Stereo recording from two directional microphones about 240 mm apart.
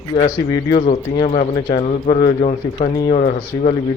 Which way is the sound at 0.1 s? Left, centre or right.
Left.